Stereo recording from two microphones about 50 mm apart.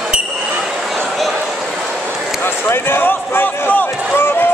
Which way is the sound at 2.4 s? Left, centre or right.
Left.